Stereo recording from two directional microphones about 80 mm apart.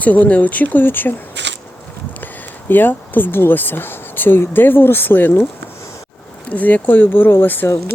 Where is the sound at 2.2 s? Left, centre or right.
Left.